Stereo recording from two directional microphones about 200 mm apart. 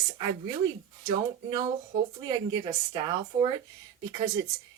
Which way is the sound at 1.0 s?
20° right (ahead or behind).